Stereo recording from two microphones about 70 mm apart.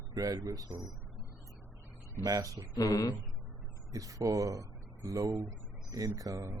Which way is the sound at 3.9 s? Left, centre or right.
Right.